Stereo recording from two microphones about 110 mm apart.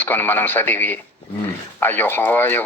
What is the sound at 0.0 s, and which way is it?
Speech, 20° left (ahead or behind).